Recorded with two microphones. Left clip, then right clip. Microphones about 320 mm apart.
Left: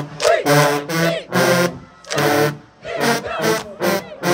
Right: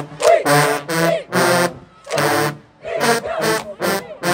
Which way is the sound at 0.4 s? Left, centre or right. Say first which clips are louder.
Even; centre.